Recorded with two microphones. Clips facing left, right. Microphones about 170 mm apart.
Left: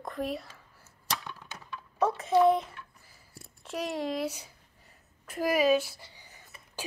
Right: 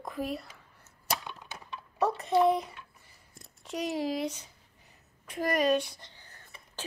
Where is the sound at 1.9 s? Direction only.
Centre (ahead or behind).